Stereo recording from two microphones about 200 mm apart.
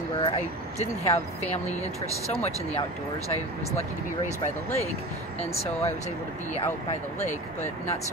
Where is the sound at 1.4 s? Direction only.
35° left (ahead or behind).